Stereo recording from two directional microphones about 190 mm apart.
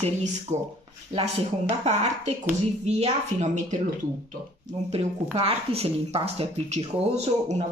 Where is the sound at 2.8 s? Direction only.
35° right (ahead or behind).